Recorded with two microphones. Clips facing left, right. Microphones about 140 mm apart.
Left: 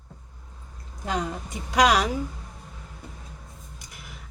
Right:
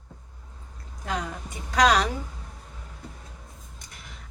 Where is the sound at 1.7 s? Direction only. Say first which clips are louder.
Left 1 dB; 10° left (ahead or behind).